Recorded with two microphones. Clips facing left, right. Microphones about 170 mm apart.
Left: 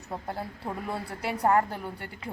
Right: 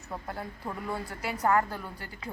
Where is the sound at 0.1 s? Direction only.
30° left (ahead or behind).